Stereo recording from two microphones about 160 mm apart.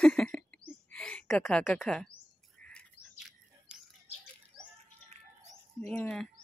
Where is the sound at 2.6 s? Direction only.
5° left (ahead or behind).